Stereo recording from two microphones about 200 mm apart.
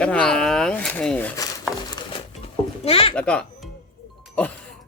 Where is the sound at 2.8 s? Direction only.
30° left (ahead or behind).